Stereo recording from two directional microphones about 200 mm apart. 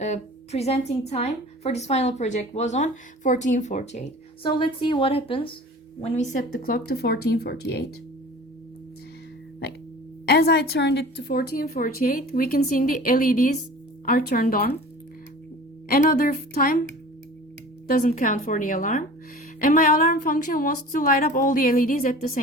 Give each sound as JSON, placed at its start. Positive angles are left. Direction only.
{"t": 0.0, "sound": "a woman's voice", "side_deg": 35}
{"t": 4.4, "sound": "a woman's voice", "side_deg": 25}
{"t": 6.0, "sound": "a woman's voice", "side_deg": 40}
{"t": 10.2, "sound": "a woman's voice", "side_deg": 55}
{"t": 15.9, "sound": "a woman's voice", "side_deg": 45}
{"t": 17.8, "sound": "a woman's voice", "side_deg": 45}